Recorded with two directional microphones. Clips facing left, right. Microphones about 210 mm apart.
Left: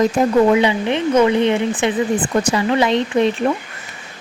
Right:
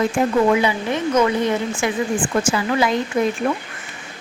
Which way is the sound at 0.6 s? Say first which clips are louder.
Left 3 dB; 25° left (ahead or behind).